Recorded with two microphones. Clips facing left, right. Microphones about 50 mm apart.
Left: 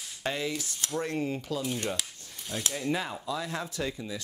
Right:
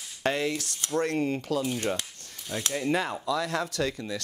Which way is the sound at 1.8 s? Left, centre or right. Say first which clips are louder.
Right 3 dB; right.